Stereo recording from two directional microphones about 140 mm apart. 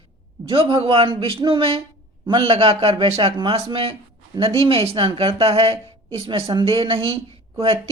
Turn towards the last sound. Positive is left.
turn(degrees=-40)  # may be behind; listen again after turning